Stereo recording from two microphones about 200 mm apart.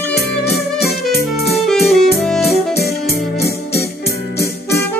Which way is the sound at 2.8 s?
50° left (ahead or behind).